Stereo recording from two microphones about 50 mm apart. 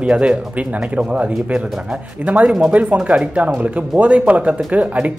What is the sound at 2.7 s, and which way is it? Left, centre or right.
Speech, right.